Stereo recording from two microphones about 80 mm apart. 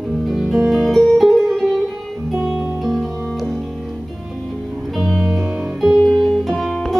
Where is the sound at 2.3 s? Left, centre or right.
Right.